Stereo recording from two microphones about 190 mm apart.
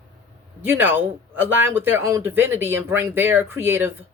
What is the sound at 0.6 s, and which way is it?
Speech, 10° right (ahead or behind).